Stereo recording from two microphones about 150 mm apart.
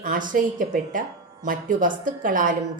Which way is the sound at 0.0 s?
65° right (ahead or behind).